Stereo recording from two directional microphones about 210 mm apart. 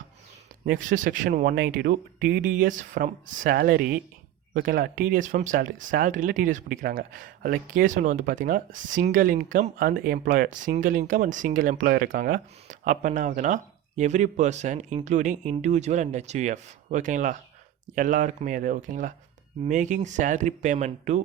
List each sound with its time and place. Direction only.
0.6 s speech: 40° right (ahead or behind)